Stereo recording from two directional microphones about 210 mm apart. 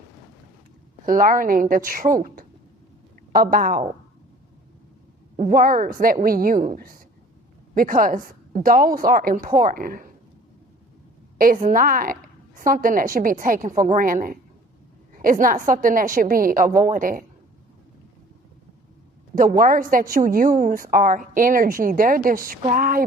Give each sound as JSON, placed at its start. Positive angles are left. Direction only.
{"t": 1.0, "sound": "a woman's voice", "side_deg": -40}
{"t": 5.4, "sound": "a woman's voice", "side_deg": -40}
{"t": 11.3, "sound": "a woman's voice", "side_deg": -40}
{"t": 19.4, "sound": "a woman's voice", "side_deg": -40}